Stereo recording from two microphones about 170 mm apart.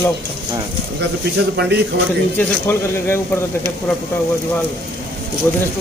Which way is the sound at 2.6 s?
15° left (ahead or behind).